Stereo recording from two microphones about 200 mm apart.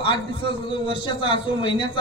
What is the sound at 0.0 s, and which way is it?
A man's voice, 25° left (ahead or behind).